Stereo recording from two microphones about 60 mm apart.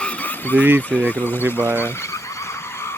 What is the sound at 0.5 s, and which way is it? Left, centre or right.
Speech, right.